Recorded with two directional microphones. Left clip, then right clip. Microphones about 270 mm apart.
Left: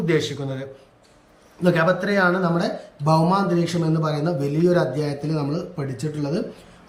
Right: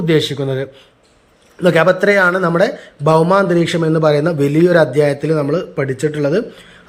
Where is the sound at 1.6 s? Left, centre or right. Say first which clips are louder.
Right 8 dB; centre.